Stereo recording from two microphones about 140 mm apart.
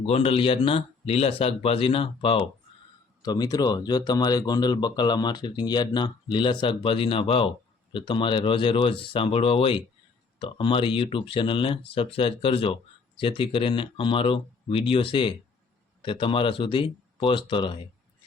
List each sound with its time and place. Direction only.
0.0 s speech: 45° left (ahead or behind)
3.2 s speech: 25° left (ahead or behind)